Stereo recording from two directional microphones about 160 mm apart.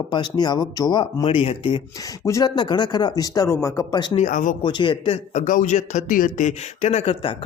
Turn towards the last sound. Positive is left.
turn(degrees=40)  # may be behind; listen again after turning